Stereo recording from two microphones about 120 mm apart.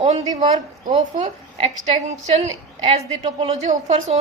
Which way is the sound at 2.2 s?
65° right (ahead or behind).